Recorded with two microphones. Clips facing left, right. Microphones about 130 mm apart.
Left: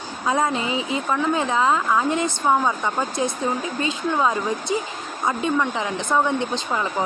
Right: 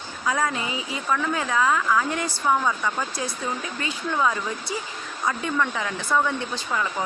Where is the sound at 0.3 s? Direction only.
25° left (ahead or behind).